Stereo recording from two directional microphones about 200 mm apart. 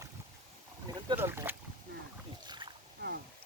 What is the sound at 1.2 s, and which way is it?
Boat, 10° right (ahead or behind).